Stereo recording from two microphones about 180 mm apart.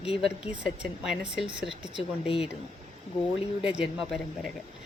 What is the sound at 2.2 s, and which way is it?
Speech, 30° left (ahead or behind).